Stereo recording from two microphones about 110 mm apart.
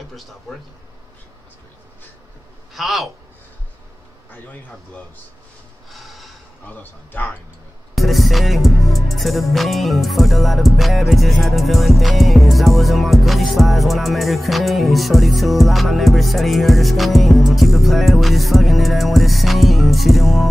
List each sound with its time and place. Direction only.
2.7 s speech: centre (ahead or behind)
4.3 s speech: 15° left (ahead or behind)
5.9 s snort: centre (ahead or behind)
6.6 s speech: 15° left (ahead or behind)
7.9 s music: centre (ahead or behind)